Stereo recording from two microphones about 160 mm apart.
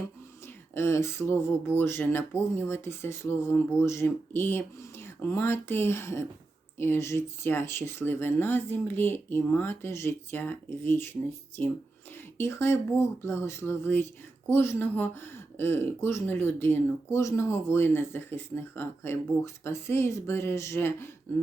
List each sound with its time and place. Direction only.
0.4 s speech: 15° left (ahead or behind)